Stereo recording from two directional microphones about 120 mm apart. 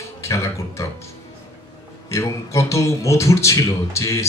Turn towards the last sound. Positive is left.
turn(degrees=25)  # may be behind; listen again after turning